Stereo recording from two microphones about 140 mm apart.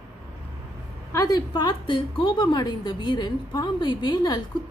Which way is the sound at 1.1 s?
25° left (ahead or behind).